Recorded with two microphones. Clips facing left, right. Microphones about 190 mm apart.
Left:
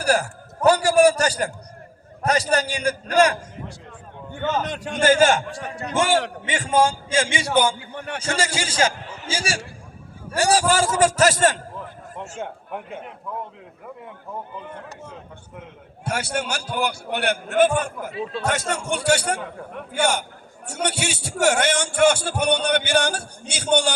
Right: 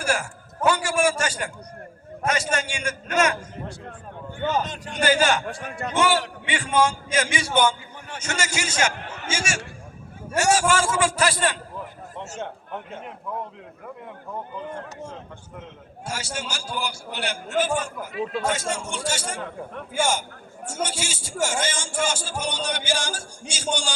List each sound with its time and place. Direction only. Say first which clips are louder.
0.0 s a man's voice: left 5 dB; 40° left (ahead or behind)
4.6 s a man's voice: left 4 dB; 65° left (ahead or behind); by 5.4 s 50° left (ahead or behind)
5.5 s a man's voice: left 1 dB; 55° right (ahead or behind)
5.9 s a man's voice: left 2 dB; 45° left (ahead or behind)
7.8 s a man's voice: left 7 dB; 70° left (ahead or behind)
8.2 s a man's voice: left 2 dB; 30° left (ahead or behind)
12.4 s a man's voice: left 2 dB; 10° left (ahead or behind)
16.0 s speech: left 6 dB; 60° left (ahead or behind)
18.1 s speech: right 1 dB; 30° left (ahead or behind)
18.4 s speech: left 2 dB; 65° left (ahead or behind)